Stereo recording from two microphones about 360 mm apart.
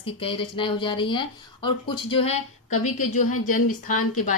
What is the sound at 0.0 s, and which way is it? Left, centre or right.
Speech, centre.